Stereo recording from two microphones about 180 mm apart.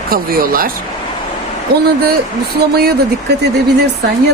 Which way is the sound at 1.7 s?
60° right (ahead or behind).